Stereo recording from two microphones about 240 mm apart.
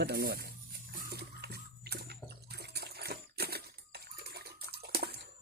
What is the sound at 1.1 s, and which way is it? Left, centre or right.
Bathtub, right.